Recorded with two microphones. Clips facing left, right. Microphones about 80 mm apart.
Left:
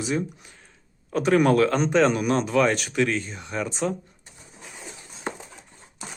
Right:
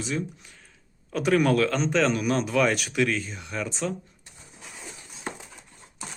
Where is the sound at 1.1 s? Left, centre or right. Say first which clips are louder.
Left 3 dB; centre.